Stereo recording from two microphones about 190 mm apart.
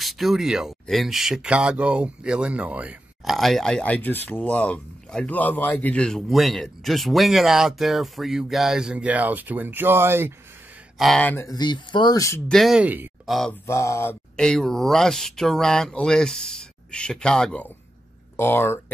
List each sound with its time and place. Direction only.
0.0 s speech: centre (ahead or behind)
11.0 s speech: 5° left (ahead or behind); by 12.4 s 20° left (ahead or behind)
12.4 s speech: centre (ahead or behind)
13.4 s speech: 10° left (ahead or behind)
14.3 s speech: 5° left (ahead or behind)